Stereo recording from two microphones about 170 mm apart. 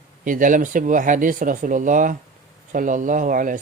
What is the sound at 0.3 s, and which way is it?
Speech, 50° right (ahead or behind).